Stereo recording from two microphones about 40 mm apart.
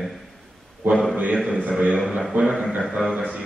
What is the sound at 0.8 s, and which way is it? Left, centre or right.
Speech, right.